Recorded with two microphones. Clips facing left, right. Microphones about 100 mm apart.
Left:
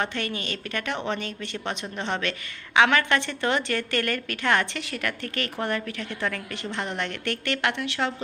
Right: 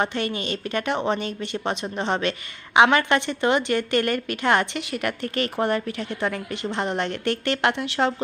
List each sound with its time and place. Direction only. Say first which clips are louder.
0.0 s a woman's voice: right 4 dB; 20° right (ahead or behind)